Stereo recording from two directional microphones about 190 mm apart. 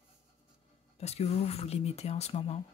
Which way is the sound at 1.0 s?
35° left (ahead or behind).